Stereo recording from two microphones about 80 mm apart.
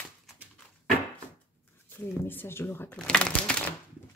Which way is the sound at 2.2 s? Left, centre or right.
Left.